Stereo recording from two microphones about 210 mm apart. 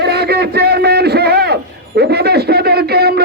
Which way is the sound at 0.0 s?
50° right (ahead or behind).